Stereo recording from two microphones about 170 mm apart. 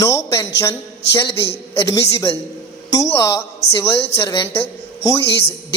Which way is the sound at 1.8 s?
20° left (ahead or behind).